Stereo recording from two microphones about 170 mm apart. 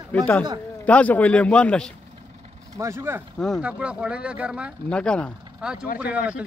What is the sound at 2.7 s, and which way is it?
Speech, 15° right (ahead or behind).